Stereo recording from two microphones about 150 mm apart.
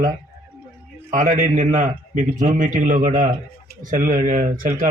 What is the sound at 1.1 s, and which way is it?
A man's voice, 60° right (ahead or behind).